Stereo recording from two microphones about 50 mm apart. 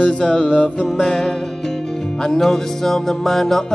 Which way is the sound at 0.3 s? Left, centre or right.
Left.